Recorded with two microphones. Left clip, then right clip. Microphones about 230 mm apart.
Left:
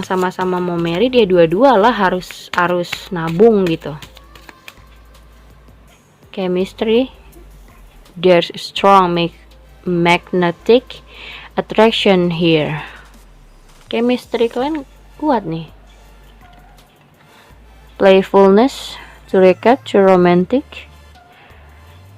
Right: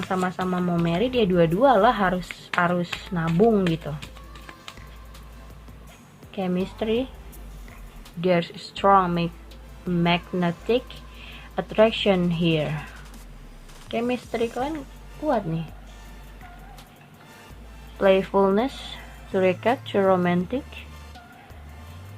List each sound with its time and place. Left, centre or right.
0.1 s speech: left
6.3 s speech: left
8.2 s speech: left
13.8 s speech: left
17.9 s speech: left